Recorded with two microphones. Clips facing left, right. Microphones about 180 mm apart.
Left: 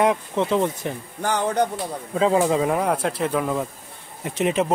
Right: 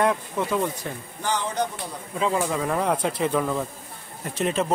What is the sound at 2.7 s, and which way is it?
Speech, 5° left (ahead or behind).